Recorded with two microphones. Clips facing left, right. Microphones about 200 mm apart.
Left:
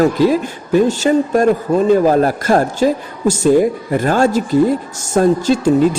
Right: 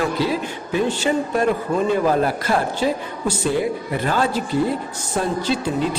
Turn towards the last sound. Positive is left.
turn(degrees=45)  # may be behind; listen again after turning